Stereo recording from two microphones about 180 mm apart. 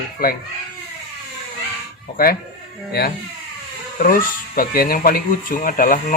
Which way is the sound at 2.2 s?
50° left (ahead or behind).